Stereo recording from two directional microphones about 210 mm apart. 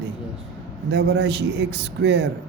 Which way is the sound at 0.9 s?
55° right (ahead or behind).